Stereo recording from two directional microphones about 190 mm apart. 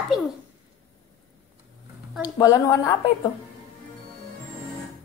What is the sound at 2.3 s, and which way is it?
Speech, 20° left (ahead or behind).